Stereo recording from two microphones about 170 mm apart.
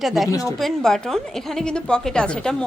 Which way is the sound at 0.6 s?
Centre (ahead or behind).